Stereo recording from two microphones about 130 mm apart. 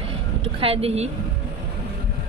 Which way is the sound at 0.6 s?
50° right (ahead or behind).